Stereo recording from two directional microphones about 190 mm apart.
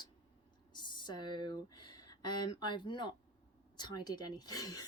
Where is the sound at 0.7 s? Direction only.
25° left (ahead or behind).